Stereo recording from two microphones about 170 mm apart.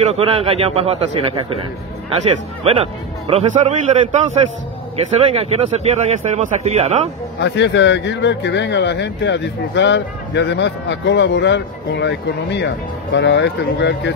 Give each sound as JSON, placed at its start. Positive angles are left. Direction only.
{"t": 0.0, "sound": "a man's voice", "side_deg": -35}
{"t": 2.6, "sound": "a man's voice", "side_deg": -35}
{"t": 7.3, "sound": "speech", "side_deg": 90}